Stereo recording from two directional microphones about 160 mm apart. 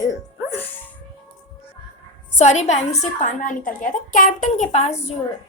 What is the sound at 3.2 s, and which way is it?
A woman's voice, 55° left (ahead or behind).